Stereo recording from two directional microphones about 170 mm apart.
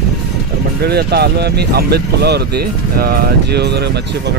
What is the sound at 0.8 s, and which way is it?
Speech, 70° right (ahead or behind).